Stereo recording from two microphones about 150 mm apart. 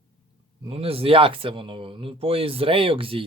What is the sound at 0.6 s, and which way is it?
Speech, 40° right (ahead or behind).